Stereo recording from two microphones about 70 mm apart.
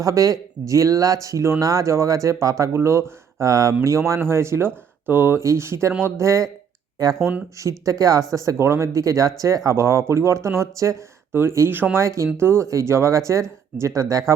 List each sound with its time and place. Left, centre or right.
0.0 s speech: right
5.4 s speech: right
7.6 s speech: right
11.7 s speech: right
11.9 s speech: right